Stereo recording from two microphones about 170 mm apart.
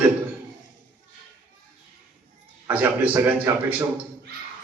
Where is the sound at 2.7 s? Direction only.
10° right (ahead or behind).